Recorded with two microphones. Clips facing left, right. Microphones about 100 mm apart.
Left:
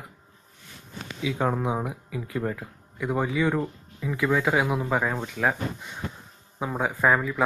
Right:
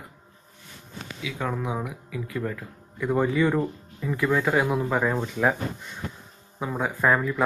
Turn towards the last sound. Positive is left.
turn(degrees=5)  # may be behind; listen again after turning